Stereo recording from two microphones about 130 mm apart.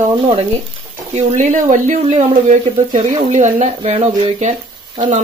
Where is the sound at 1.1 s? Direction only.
70° right (ahead or behind).